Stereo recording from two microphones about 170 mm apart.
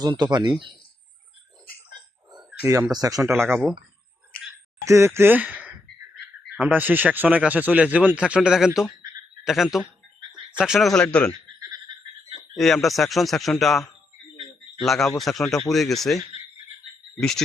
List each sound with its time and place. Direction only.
0.0 s speech: 25° right (ahead or behind)
2.5 s speech: 15° right (ahead or behind)
4.9 s a man's voice: 15° right (ahead or behind); by 11.3 s 5° left (ahead or behind)
11.3 s frog: 20° right (ahead or behind)
12.5 s a man's voice: centre (ahead or behind)